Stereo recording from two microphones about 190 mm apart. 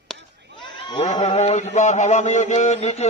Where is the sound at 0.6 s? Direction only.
25° left (ahead or behind).